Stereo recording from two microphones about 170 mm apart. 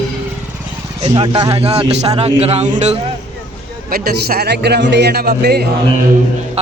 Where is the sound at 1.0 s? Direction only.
30° right (ahead or behind).